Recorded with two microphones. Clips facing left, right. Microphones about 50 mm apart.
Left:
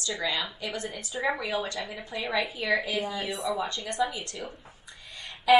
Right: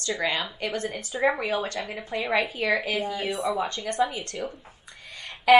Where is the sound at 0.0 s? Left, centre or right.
Right.